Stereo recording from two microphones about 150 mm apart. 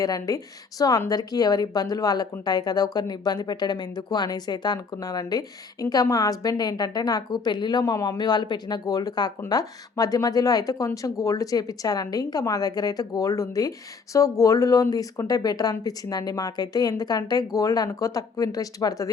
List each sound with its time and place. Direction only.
0.0 s speech: 25° left (ahead or behind)